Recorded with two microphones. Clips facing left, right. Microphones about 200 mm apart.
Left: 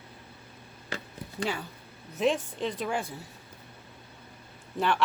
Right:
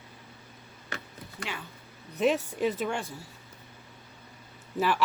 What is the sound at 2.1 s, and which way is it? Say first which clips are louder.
Speech: right 1 dB; 5° right (ahead or behind).